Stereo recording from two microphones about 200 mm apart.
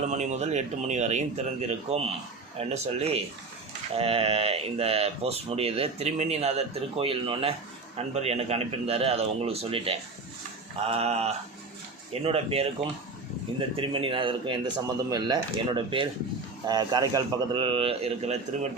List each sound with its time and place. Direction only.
0.1 s a man's voice: 35° right (ahead or behind)